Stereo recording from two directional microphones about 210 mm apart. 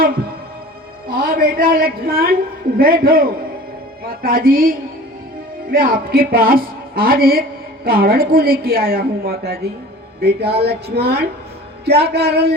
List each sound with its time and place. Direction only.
1.1 s a woman's voice: 45° right (ahead or behind)